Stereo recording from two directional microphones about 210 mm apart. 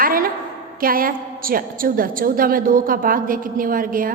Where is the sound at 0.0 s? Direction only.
45° right (ahead or behind).